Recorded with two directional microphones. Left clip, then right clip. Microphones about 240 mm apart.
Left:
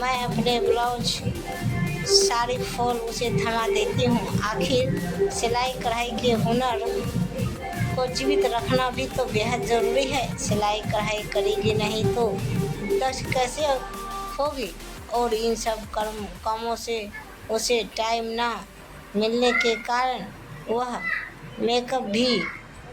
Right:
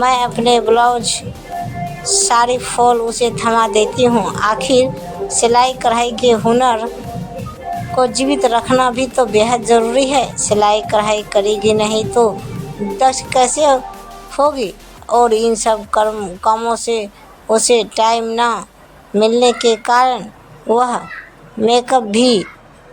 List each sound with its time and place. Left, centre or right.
0.0 s speech: right
2.2 s speech: right
7.9 s speech: right